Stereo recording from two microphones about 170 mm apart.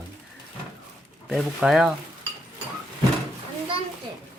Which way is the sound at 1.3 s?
Centre (ahead or behind).